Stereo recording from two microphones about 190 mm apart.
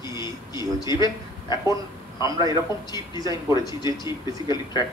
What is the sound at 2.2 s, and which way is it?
Speech, 20° right (ahead or behind).